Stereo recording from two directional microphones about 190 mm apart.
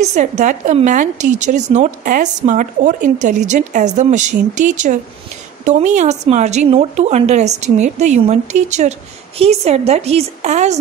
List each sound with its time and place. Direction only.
0.0 s a woman's voice: 40° right (ahead or behind)